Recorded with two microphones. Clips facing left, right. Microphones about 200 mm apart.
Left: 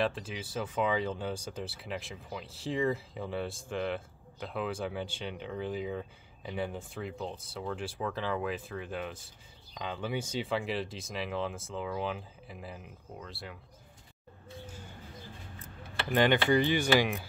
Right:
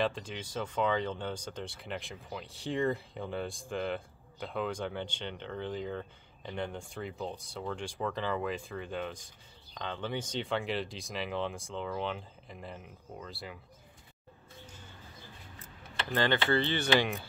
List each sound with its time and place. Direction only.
0.0 s speech: 5° left (ahead or behind)
16.1 s speech: 15° left (ahead or behind)